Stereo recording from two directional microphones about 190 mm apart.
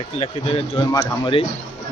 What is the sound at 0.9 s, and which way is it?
Speech, 15° left (ahead or behind).